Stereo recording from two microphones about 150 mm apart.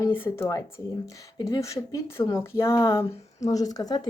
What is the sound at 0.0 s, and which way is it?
A woman's voice, 15° left (ahead or behind).